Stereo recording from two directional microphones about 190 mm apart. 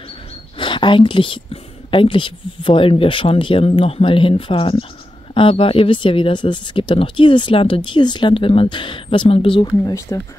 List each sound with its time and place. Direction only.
0.6 s speech: 25° left (ahead or behind)